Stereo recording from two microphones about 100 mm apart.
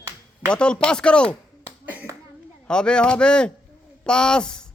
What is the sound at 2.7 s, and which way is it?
A man's voice, 10° left (ahead or behind).